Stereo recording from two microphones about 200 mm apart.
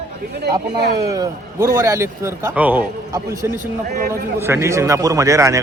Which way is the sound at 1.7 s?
15° right (ahead or behind).